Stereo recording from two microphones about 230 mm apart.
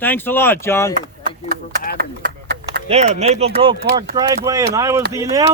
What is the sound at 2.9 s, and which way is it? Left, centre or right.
Speech, right.